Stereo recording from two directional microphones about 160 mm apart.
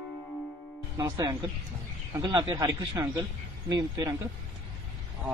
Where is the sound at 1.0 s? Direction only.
20° right (ahead or behind).